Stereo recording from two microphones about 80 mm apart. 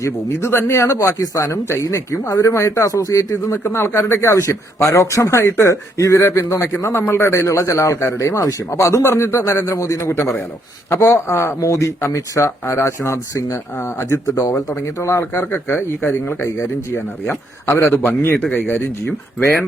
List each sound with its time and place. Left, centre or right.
0.0 s a man's voice: left
1.2 s a man's voice: left